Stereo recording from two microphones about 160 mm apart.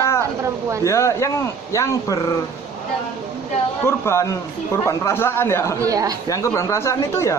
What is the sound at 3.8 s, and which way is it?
Speech, 15° left (ahead or behind).